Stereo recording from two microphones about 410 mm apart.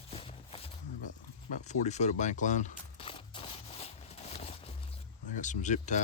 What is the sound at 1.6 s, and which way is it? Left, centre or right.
Crunch, centre.